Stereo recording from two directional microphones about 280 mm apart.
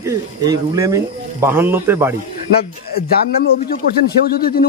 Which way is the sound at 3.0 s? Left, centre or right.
Left.